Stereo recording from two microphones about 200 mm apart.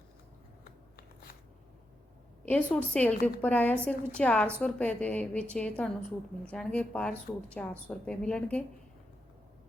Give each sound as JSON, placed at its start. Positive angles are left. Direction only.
{"t": 0.6, "sound": "scissors", "side_deg": 50}
{"t": 2.5, "sound": "a woman's voice", "side_deg": 5}